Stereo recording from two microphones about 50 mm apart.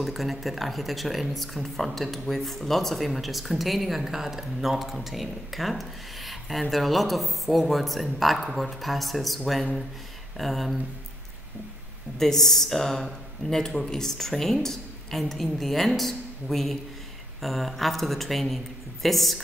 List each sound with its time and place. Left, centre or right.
0.0 s speech: centre
12.2 s speech: centre